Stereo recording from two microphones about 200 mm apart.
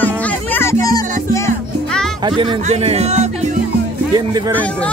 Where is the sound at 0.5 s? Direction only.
15° left (ahead or behind).